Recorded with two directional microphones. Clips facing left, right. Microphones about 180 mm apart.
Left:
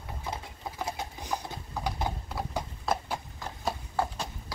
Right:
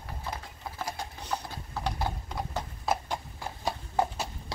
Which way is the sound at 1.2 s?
15° left (ahead or behind).